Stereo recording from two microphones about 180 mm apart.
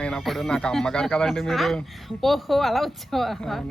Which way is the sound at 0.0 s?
Centre (ahead or behind).